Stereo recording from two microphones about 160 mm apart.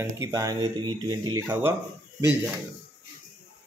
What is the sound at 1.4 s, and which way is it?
Speech, 15° right (ahead or behind).